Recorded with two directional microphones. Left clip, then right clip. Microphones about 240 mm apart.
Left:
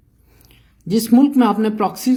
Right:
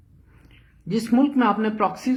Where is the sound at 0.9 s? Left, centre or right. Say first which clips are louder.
Left 6 dB; left.